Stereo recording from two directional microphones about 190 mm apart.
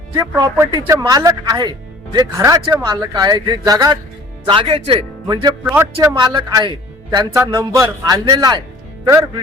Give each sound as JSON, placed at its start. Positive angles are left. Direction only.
{"t": 0.2, "sound": "a man's voice", "side_deg": -15}
{"t": 6.1, "sound": "a man's voice", "side_deg": -25}